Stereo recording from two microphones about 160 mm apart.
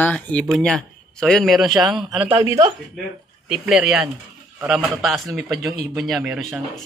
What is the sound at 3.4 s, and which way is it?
Speech, 5° right (ahead or behind).